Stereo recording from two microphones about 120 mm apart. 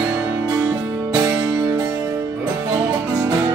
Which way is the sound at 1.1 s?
25° right (ahead or behind).